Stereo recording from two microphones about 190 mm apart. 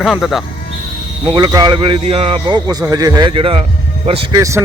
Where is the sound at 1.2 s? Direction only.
20° right (ahead or behind).